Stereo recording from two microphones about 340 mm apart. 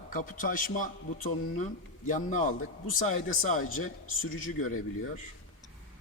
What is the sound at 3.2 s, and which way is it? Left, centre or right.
Speech, left.